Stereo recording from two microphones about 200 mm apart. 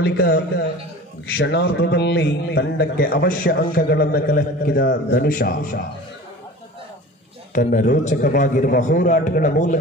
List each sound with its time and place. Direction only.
0.0 s a man's voice: 55° left (ahead or behind)
7.5 s a man's voice: 45° left (ahead or behind)